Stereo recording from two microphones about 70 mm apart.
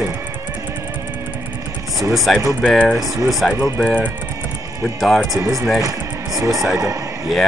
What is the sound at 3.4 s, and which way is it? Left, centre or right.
Speech, centre.